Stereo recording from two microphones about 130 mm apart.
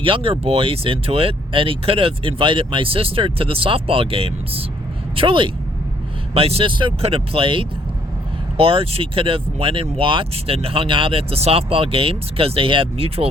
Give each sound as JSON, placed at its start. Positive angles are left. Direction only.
{"t": 0.0, "sound": "speech", "side_deg": -45}